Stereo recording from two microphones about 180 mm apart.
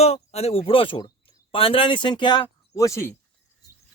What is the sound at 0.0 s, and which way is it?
Speech, 35° left (ahead or behind).